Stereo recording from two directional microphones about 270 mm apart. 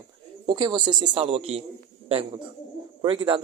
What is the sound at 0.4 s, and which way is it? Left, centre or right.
Speech, centre.